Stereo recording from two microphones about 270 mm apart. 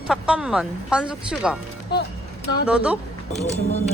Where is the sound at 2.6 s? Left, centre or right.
Centre.